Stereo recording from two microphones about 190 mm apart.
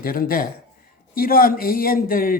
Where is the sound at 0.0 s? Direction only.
50° left (ahead or behind).